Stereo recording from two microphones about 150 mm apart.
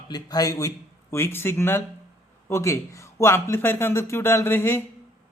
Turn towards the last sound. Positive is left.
turn(degrees=15)  # may be behind; listen again after turning